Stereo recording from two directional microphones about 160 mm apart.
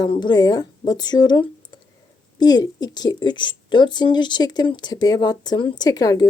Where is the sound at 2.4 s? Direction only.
25° left (ahead or behind).